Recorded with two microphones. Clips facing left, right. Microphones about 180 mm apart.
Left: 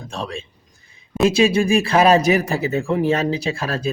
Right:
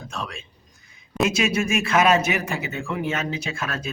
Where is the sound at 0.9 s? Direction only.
30° left (ahead or behind).